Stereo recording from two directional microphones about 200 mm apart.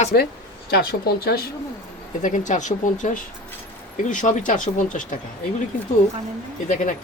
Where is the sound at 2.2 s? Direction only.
40° left (ahead or behind).